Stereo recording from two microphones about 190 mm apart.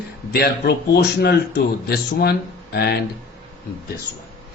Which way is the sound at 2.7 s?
55° left (ahead or behind).